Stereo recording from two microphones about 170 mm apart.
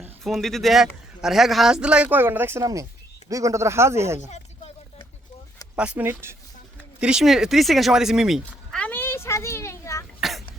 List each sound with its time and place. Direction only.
0.3 s speech: centre (ahead or behind); by 4.2 s 15° right (ahead or behind)
5.7 s speech: 5° right (ahead or behind)
7.0 s sheep: 5° right (ahead or behind); by 10.1 s 15° left (ahead or behind)
10.2 s a sound: centre (ahead or behind)